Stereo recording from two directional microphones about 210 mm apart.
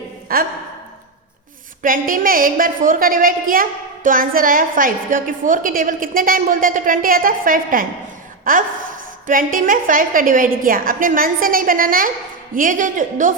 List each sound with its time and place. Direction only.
0.3 s speech: 45° right (ahead or behind)
1.8 s a woman's voice: 40° right (ahead or behind)